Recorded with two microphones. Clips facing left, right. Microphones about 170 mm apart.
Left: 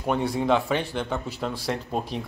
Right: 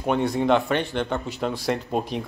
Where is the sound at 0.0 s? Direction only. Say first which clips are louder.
Right 2 dB; 5° left (ahead or behind).